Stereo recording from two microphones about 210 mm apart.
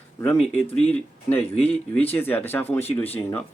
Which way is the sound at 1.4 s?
30° left (ahead or behind).